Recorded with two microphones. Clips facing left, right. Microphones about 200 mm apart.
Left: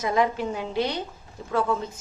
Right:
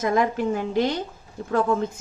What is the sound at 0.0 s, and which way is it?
A woman's voice, 50° right (ahead or behind).